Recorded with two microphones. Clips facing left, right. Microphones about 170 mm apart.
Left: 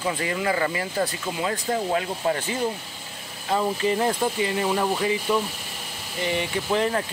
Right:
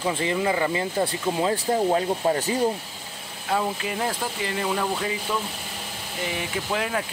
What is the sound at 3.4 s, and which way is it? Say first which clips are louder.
Speech: left 3 dB; centre (ahead or behind).